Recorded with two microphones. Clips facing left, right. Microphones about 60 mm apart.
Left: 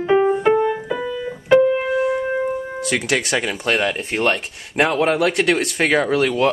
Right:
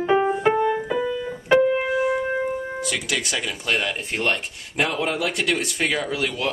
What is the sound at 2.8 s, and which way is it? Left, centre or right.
Speech, left.